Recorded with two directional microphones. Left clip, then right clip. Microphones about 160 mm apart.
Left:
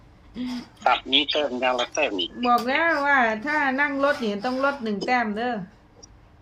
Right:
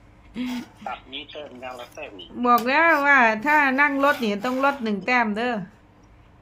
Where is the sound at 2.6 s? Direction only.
15° right (ahead or behind).